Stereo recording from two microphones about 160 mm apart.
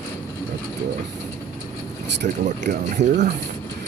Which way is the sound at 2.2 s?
55° right (ahead or behind).